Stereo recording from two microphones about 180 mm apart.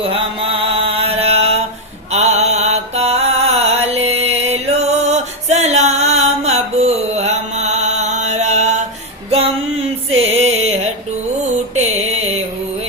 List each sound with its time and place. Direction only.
0.0 s mantra: 30° right (ahead or behind)
9.3 s music: 35° right (ahead or behind)